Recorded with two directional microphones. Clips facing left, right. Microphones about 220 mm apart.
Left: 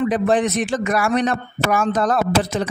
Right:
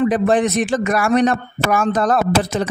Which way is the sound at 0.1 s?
50° right (ahead or behind).